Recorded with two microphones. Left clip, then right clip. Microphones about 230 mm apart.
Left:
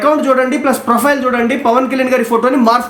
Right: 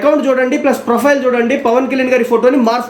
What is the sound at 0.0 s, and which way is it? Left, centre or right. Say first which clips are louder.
A man's voice: even; centre.